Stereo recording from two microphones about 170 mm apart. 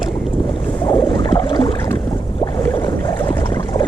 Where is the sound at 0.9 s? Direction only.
25° left (ahead or behind).